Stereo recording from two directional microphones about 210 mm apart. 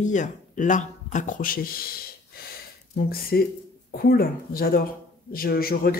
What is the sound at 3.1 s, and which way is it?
Speech, 45° left (ahead or behind).